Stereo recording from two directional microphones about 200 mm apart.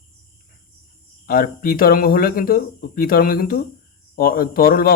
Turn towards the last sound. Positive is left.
turn(degrees=45)  # may be behind; listen again after turning